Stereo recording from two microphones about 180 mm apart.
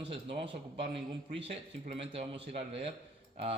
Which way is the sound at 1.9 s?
30° right (ahead or behind).